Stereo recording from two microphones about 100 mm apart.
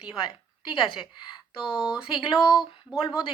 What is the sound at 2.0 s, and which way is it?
Speech, 55° left (ahead or behind).